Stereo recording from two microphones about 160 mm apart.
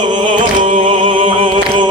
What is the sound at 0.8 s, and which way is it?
Music, 35° right (ahead or behind).